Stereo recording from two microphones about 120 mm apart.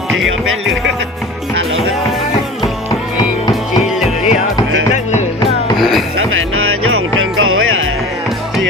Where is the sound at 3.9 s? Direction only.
5° right (ahead or behind).